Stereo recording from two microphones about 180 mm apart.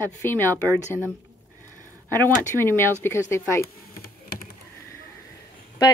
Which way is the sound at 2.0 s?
10° left (ahead or behind).